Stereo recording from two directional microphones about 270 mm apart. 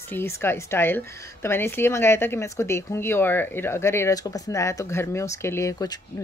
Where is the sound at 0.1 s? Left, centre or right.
Centre.